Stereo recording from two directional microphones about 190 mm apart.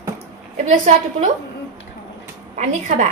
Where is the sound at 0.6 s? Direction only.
40° right (ahead or behind).